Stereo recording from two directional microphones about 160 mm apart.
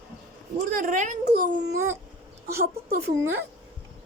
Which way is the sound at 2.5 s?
80° right.